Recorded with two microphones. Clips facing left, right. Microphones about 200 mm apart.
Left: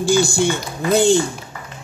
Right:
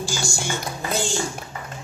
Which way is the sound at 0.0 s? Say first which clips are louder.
Left 12 dB; 60° left (ahead or behind).